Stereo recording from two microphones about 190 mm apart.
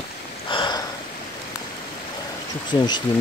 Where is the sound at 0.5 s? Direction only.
25° left (ahead or behind).